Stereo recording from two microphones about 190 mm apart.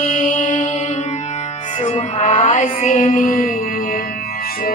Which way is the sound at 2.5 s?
45° left (ahead or behind).